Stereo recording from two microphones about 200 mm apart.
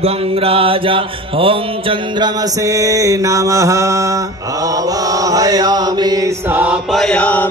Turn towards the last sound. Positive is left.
turn(degrees=5)  # may be behind; listen again after turning